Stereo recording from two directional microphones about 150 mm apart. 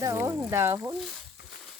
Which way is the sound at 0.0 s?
20° right (ahead or behind).